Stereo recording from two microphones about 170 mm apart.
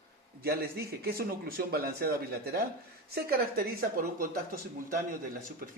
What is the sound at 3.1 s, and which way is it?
A man's voice, 60° right (ahead or behind).